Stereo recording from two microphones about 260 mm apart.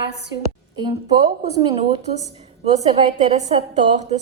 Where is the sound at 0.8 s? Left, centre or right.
Centre.